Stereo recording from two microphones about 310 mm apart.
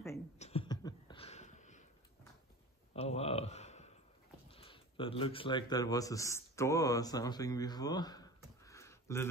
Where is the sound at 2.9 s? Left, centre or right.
Centre.